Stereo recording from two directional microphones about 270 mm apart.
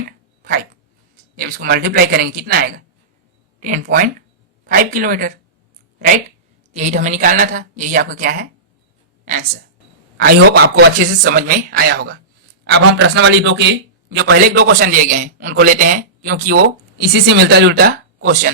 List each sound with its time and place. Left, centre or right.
0.4 s a sound: right
1.1 s a man's voice: right
6.7 s a man's voice: right